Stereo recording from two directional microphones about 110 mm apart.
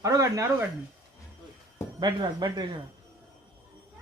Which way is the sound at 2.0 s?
40° right (ahead or behind).